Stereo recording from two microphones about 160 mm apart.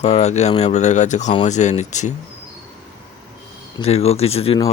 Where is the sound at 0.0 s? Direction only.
45° left (ahead or behind).